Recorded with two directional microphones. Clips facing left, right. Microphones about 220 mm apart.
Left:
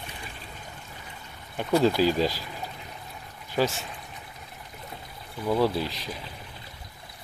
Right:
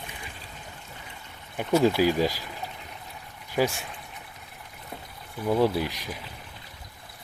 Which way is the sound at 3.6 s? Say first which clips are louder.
Even; 10° right (ahead or behind).